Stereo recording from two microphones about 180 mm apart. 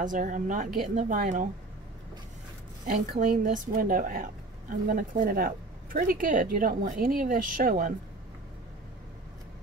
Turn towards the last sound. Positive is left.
turn(degrees=-50)  # may be behind; listen again after turning